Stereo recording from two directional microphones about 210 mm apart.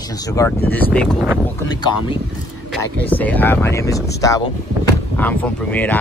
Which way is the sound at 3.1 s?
10° left (ahead or behind).